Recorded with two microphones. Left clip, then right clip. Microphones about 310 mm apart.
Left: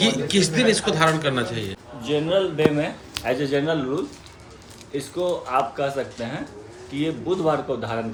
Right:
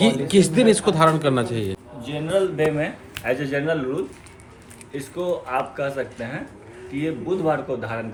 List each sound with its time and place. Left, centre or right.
0.0 s a man's voice: centre
2.0 s speech: centre
4.9 s speech: centre